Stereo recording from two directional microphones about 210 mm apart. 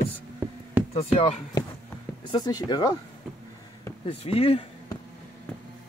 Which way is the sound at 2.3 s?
20° left (ahead or behind).